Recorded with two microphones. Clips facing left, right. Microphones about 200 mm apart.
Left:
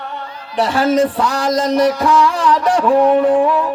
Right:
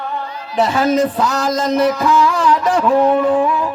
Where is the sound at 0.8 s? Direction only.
30° left (ahead or behind).